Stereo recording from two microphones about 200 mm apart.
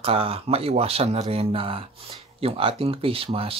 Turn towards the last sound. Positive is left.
turn(degrees=-30)  # may be behind; listen again after turning